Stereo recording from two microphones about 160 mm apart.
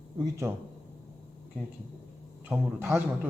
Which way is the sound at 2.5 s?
5° right (ahead or behind).